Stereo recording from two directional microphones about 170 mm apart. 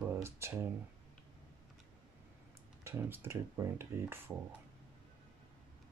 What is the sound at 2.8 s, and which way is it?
Speech, 15° right (ahead or behind).